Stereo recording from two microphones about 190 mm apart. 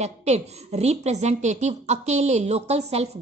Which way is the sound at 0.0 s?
35° right (ahead or behind).